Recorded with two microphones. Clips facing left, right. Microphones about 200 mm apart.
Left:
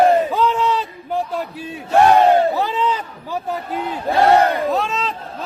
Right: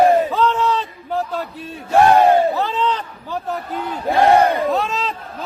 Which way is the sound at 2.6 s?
10° left (ahead or behind).